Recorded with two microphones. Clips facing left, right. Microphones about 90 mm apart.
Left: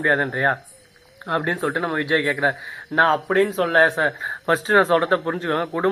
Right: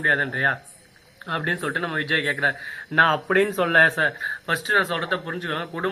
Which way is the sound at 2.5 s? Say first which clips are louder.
Left 2 dB; 5° left (ahead or behind).